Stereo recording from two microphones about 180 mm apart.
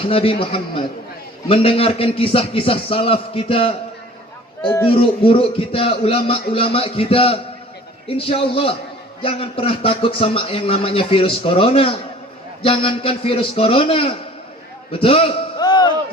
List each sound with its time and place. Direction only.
0.0 s a man's voice: 30° left (ahead or behind)
4.9 s a man's voice: 30° left (ahead or behind)
14.9 s a sound: 30° left (ahead or behind)